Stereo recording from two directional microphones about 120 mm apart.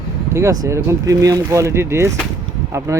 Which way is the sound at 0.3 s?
25° right (ahead or behind).